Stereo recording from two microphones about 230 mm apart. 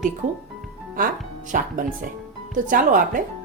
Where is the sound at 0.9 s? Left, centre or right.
Right.